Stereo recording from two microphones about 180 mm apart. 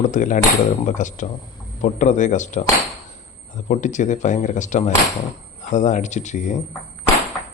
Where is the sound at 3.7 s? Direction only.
45° left (ahead or behind).